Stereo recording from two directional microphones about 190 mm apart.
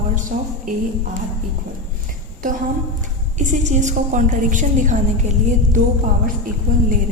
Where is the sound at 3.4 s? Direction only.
40° right (ahead or behind).